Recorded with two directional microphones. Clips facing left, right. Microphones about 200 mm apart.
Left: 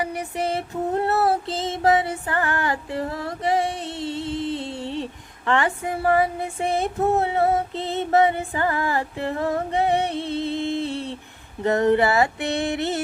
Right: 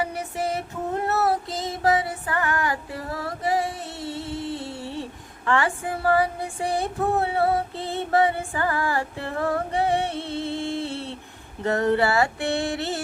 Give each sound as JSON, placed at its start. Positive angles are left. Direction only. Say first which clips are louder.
{"t": 0.0, "sound": "female singing", "louder": "left 1 dB", "side_deg": 15}
{"t": 5.5, "sound": "music", "louder": "left 1 dB", "side_deg": 20}